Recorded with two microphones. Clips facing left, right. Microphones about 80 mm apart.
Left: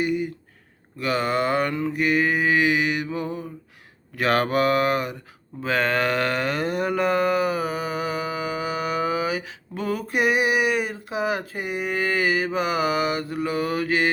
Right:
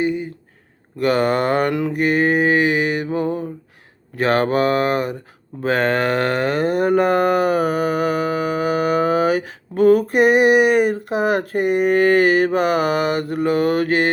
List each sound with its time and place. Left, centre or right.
0.0 s a sound: right
0.9 s cattle: right
1.7 s mantra: right
2.0 s cattle: right
4.2 s speech: right
5.6 s cattle: right